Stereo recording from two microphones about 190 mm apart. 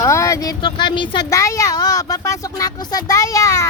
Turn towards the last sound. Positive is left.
turn(degrees=15)  # may be behind; listen again after turning